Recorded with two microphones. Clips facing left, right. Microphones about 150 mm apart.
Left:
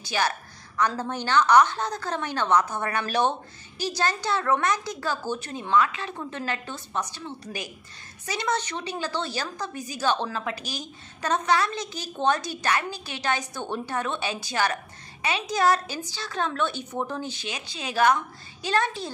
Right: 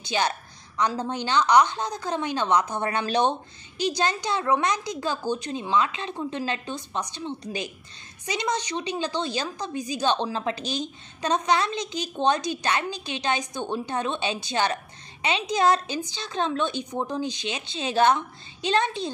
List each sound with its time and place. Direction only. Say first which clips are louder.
0.0 s a woman's voice: right 1 dB; 20° right (ahead or behind)